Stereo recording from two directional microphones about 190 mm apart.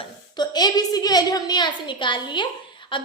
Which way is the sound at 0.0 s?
20° left (ahead or behind).